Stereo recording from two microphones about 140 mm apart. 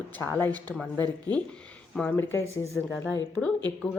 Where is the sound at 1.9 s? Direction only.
10° left (ahead or behind).